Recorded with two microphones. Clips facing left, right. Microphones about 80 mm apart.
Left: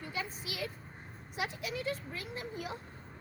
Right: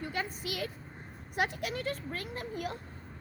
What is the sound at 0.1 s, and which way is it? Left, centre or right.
Vehicle, right.